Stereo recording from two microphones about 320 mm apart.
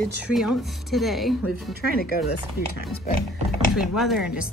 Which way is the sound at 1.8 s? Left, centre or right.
Left.